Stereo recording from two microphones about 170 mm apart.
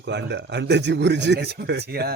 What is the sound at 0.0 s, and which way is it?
A man's voice, 90° right.